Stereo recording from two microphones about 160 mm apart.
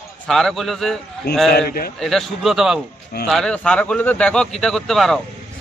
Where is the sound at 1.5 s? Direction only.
75° left (ahead or behind).